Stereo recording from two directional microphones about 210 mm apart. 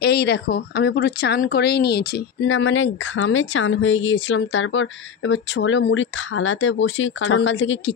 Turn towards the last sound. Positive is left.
turn(degrees=60)  # may be behind; listen again after turning